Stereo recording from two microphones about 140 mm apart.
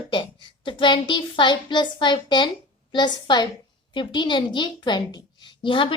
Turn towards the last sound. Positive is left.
turn(degrees=35)  # may be behind; listen again after turning